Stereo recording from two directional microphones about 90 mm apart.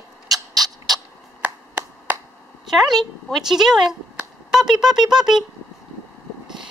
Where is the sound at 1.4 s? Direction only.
15° right (ahead or behind).